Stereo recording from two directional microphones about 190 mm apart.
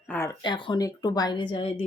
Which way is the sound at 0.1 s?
15° left (ahead or behind).